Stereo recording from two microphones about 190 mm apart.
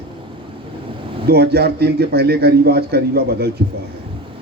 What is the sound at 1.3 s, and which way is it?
A man's voice, 55° right (ahead or behind).